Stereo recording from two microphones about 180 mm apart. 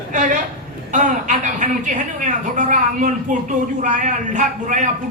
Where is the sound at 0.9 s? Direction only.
45° right (ahead or behind).